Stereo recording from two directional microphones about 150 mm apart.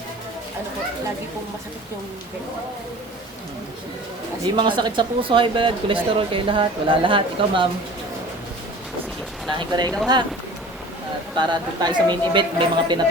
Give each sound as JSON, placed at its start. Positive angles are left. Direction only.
{"t": 4.5, "sound": "speech", "side_deg": -30}
{"t": 9.5, "sound": "speech", "side_deg": -30}
{"t": 11.3, "sound": "speech", "side_deg": -30}